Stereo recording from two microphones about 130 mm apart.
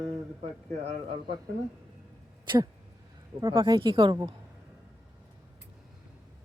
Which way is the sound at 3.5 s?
40° right (ahead or behind).